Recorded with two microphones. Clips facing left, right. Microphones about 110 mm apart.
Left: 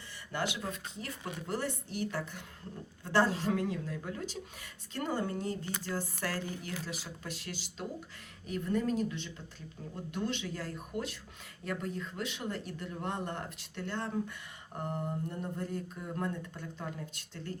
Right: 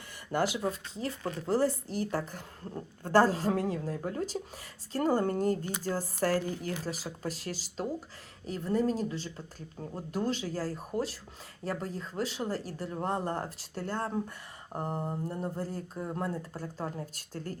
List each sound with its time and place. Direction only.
0.3 s speech: 40° right (ahead or behind)
0.6 s speech: 30° right (ahead or behind)